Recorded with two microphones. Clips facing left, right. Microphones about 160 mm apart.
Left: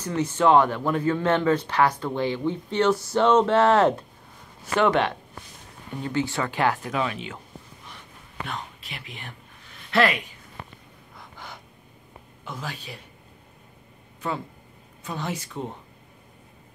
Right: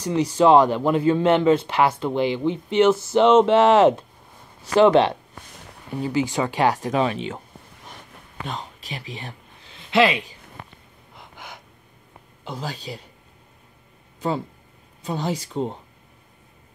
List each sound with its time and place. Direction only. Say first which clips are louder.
0.0 s speech: right 4 dB; 15° right (ahead or behind); by 5.1 s 30° right (ahead or behind)
6.0 s speech: right 3 dB; 15° right (ahead or behind)
6.8 s speech: right 6 dB; 30° right (ahead or behind)
8.8 s a sound: right 6 dB; 35° right (ahead or behind)
9.8 s a sound: right 3 dB; 15° right (ahead or behind)
11.1 s gasp: right 1 dB; 20° right (ahead or behind)
12.4 s speech: right 4 dB; 30° right (ahead or behind)
15.0 s speech: right 5 dB; 35° right (ahead or behind)